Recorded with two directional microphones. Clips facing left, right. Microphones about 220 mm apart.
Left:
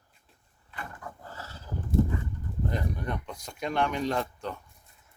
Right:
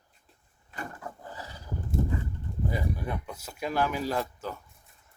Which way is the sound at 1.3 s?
15° right (ahead or behind).